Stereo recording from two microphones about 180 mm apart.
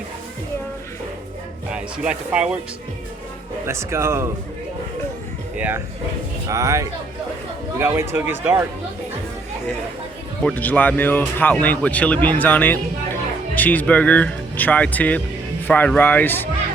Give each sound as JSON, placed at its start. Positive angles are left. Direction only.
{"t": 1.7, "sound": "speech", "side_deg": -5}
{"t": 3.7, "sound": "speech", "side_deg": -15}
{"t": 5.5, "sound": "speech", "side_deg": -10}
{"t": 10.4, "sound": "speech", "side_deg": 10}